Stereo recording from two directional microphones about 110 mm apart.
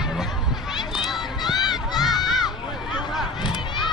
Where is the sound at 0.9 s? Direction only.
Centre (ahead or behind).